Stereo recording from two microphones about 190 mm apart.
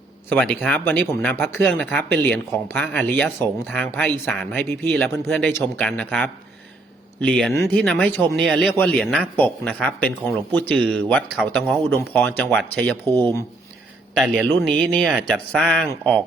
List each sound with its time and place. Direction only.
0.3 s speech: 5° left (ahead or behind)
14.1 s speech: 5° right (ahead or behind)
14.4 s speech: 10° left (ahead or behind)